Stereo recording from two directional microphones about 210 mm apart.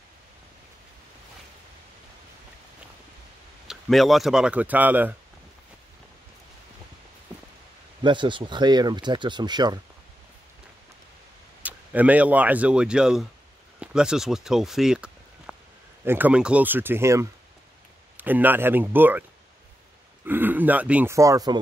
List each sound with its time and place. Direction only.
3.6 s speech: centre (ahead or behind)
8.0 s speech: 20° right (ahead or behind)
11.6 s speech: 5° right (ahead or behind)
20.2 s speech: 10° right (ahead or behind)